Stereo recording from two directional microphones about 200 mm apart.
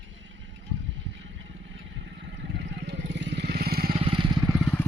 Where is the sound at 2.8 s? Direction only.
65° right (ahead or behind).